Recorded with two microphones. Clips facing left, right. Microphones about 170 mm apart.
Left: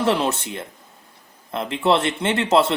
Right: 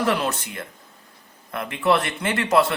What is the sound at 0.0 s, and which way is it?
Speech, 30° left (ahead or behind).